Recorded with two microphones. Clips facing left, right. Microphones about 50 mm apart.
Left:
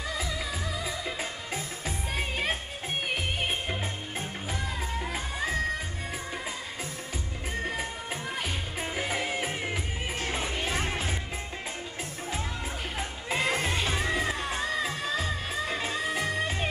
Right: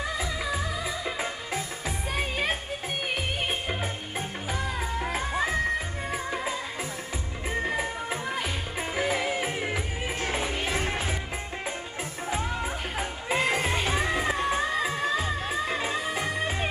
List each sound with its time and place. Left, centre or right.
0.2 s music: centre
3.6 s music: right
7.6 s music: centre
12.3 s music: centre